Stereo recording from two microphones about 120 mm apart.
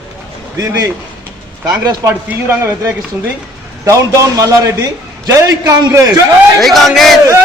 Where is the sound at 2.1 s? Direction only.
20° right (ahead or behind).